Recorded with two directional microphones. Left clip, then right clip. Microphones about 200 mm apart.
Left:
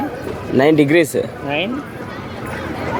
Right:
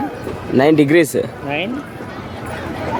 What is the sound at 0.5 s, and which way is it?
Speech, 20° right (ahead or behind).